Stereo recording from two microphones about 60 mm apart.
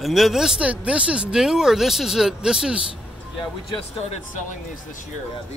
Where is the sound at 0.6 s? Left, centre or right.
Right.